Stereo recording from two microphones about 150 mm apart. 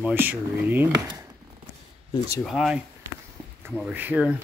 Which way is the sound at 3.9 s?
10° right (ahead or behind).